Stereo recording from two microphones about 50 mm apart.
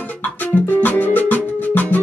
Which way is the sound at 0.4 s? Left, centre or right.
Left.